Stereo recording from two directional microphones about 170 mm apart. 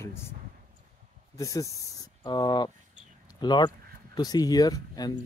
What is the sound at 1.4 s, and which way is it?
Speech, 20° left (ahead or behind).